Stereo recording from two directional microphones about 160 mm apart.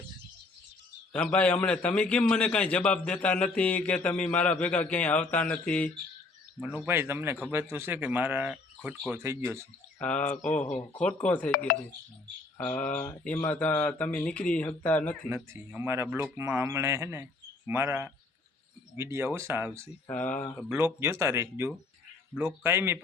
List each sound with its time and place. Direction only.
1.1 s a man's voice: 10° left (ahead or behind)
6.6 s speech: 5° right (ahead or behind)
10.0 s a man's voice: 10° left (ahead or behind)
12.5 s a man's voice: 10° left (ahead or behind)
15.4 s speech: 15° right (ahead or behind)
20.1 s a man's voice: 10° left (ahead or behind)
20.7 s speech: 15° right (ahead or behind)